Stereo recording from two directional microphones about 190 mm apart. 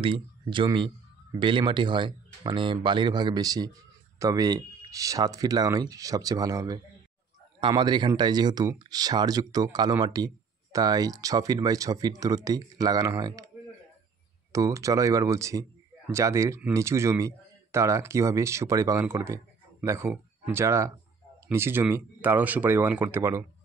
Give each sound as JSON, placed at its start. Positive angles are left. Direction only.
{"t": 0.0, "sound": "speech", "side_deg": -25}
{"t": 14.5, "sound": "speech", "side_deg": -15}